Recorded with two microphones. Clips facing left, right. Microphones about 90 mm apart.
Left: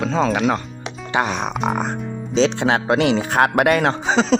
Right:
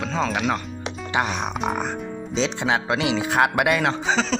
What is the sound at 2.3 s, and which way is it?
Speech, 70° left (ahead or behind).